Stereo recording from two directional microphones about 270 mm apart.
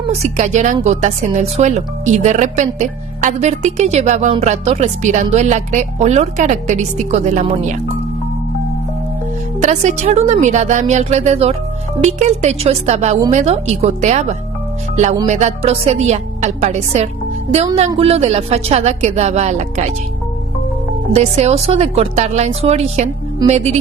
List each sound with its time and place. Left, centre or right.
0.1 s a woman's voice: right
9.6 s a woman's voice: right
21.1 s a woman's voice: right